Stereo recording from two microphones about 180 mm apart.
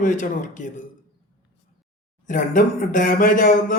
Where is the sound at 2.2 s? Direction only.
45° left (ahead or behind).